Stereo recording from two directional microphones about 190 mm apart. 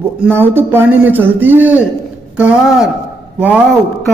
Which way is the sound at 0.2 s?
10° right (ahead or behind).